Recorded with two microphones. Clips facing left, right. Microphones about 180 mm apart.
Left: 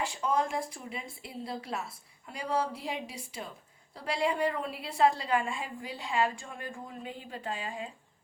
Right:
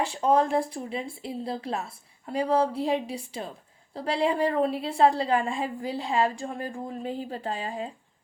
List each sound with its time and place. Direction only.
0.0 s a woman's voice: 35° right (ahead or behind)